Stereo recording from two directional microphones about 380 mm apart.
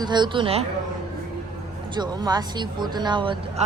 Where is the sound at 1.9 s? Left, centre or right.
Centre.